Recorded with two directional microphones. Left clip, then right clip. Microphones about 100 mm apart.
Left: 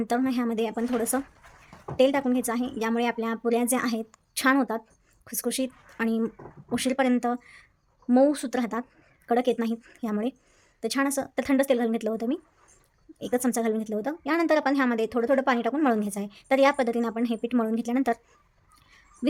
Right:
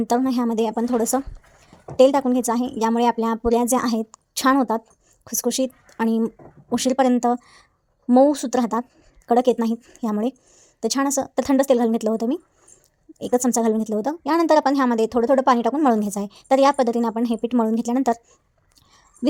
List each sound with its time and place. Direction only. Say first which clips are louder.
0.1 s speech: right 6 dB; 45° right (ahead or behind)